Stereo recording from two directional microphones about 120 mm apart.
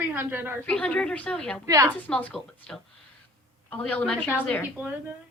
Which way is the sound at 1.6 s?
25° right (ahead or behind).